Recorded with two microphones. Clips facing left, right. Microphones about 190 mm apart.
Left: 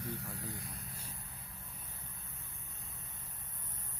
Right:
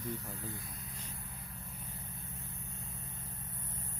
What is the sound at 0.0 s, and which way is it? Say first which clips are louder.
Speech: right 2 dB; 70° left (ahead or behind).